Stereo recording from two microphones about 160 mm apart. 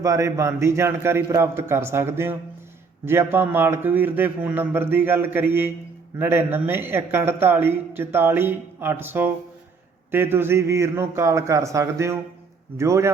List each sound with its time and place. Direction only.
0.0 s a man's voice: 20° right (ahead or behind)